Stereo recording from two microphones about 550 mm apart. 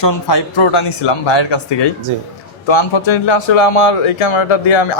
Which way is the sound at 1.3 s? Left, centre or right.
Left.